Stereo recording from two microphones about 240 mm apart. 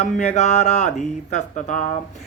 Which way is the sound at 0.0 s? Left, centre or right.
Left.